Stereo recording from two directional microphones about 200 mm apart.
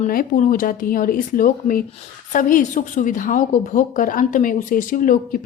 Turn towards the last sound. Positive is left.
turn(degrees=45)  # may be behind; listen again after turning